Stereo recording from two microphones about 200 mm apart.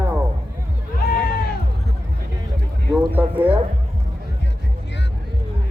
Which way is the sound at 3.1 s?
10° right (ahead or behind).